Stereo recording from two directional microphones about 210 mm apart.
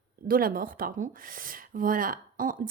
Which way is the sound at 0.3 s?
45° right (ahead or behind).